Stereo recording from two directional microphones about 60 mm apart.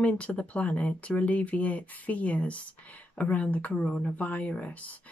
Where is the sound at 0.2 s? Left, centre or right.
Left.